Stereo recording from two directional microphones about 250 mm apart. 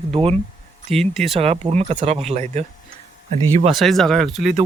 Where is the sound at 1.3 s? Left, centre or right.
Right.